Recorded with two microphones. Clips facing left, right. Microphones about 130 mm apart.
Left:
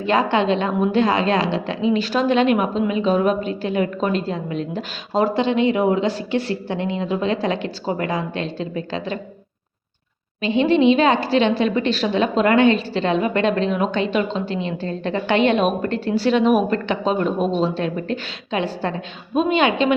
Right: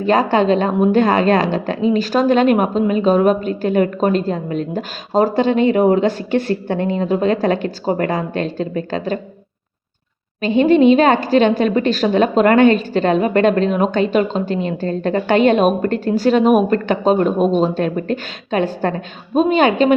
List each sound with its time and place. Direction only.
0.0 s a woman's voice: 40° right (ahead or behind)
10.4 s a woman's voice: 45° right (ahead or behind)